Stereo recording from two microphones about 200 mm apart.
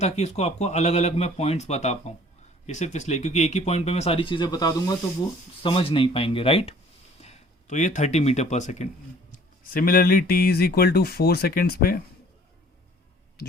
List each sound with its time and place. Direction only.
0.0 s speech: 35° left (ahead or behind); by 11.9 s 50° left (ahead or behind)